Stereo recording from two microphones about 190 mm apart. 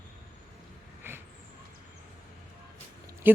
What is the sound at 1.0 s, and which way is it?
Vehicle, 10° right (ahead or behind).